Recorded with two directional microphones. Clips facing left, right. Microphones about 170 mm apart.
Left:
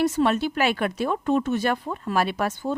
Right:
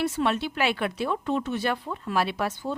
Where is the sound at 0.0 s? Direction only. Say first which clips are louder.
Left 4 dB; 40° left (ahead or behind).